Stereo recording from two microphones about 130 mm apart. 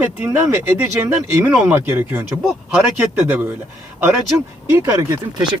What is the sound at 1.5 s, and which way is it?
Speech, 15° right (ahead or behind).